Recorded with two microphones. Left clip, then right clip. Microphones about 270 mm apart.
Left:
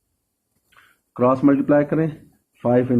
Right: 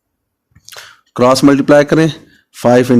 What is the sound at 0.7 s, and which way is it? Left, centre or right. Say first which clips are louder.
Speech: right 15 dB; right.